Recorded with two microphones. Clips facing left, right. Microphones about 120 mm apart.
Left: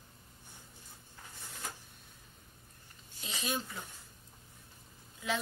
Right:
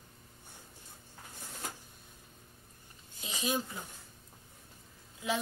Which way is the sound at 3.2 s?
15° right (ahead or behind).